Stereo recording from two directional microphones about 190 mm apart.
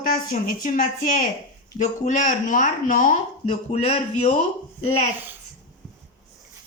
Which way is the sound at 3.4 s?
35° left (ahead or behind).